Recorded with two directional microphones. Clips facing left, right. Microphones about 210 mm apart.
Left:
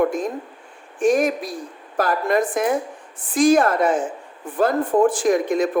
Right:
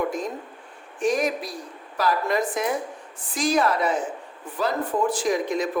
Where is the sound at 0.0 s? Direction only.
50° left (ahead or behind).